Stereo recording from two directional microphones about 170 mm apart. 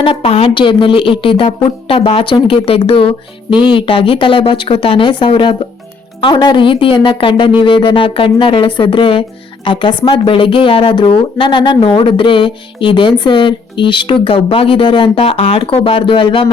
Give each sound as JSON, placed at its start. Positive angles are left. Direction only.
{"t": 0.0, "sound": "speech", "side_deg": 35}